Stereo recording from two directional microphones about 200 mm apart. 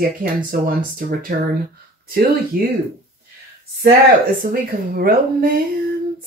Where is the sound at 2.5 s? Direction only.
45° right (ahead or behind).